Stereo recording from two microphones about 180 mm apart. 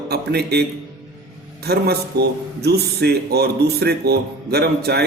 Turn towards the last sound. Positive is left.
turn(degrees=-65)  # may be behind; listen again after turning